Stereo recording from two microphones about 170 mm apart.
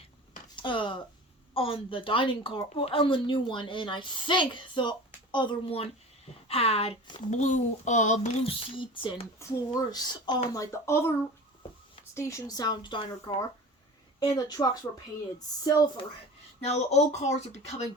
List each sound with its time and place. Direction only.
0.5 s a woman's voice: 30° left (ahead or behind)
9.4 s a woman's voice: 20° left (ahead or behind)
12.1 s a woman's voice: 20° left (ahead or behind)
16.6 s speech: 40° left (ahead or behind)